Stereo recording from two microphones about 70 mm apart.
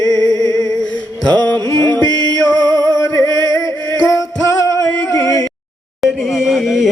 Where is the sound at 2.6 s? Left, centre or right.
Right.